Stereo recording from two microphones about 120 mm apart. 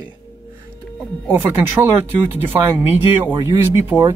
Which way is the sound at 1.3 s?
20° right (ahead or behind).